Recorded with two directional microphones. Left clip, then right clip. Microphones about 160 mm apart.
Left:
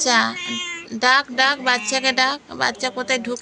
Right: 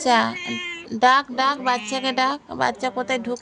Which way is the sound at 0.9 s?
50° right (ahead or behind).